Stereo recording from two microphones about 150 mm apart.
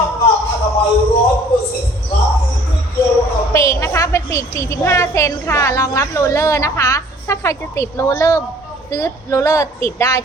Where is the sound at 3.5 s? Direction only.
20° left (ahead or behind).